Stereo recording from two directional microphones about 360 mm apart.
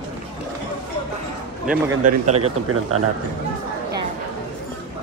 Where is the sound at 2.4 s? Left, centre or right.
Right.